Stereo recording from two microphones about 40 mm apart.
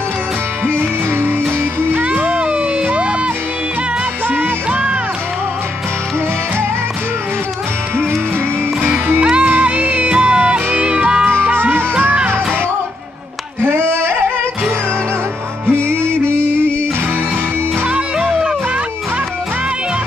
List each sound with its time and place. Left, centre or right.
0.7 s music: right
2.0 s music: right
4.6 s music: right
8.9 s music: right
9.2 s music: right
9.6 s music: right
10.0 s music: right
11.5 s music: right
13.6 s a sound: right
15.6 s music: right
17.8 s music: right
18.2 s music: right